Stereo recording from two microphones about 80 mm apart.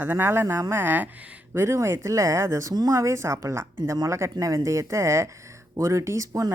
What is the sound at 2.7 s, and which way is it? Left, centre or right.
Speech, right.